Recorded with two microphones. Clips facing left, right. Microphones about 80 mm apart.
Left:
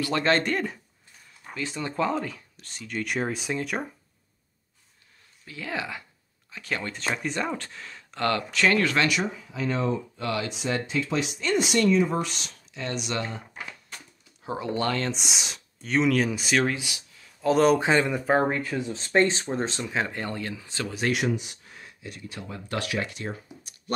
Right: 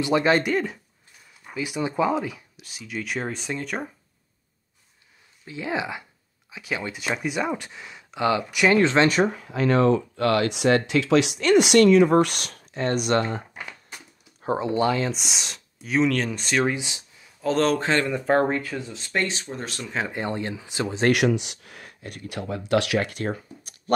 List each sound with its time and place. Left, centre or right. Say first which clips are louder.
0.0 s speech: right 3 dB; centre
5.4 s speech: right 5 dB; right
9.1 s speech: right 6 dB; right
14.6 s speech: right 4 dB; centre
16.6 s speech: right 2 dB; right
17.4 s speech: left 2 dB; centre
18.9 s speech: left 8 dB; left
20.1 s speech: right 4 dB; right
21.1 s speech: right 6 dB; right